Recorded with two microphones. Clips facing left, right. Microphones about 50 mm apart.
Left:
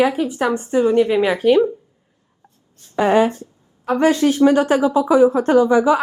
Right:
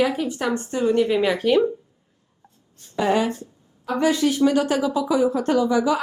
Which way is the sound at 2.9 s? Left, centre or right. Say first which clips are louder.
Left 6 dB; left.